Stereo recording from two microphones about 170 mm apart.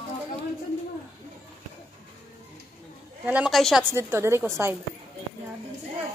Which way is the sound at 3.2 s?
5° right (ahead or behind).